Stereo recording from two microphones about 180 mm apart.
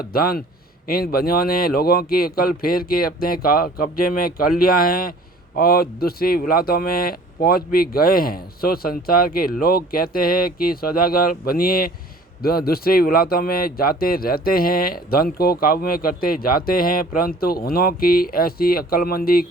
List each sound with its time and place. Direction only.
0.0 s a man's voice: 55° left (ahead or behind)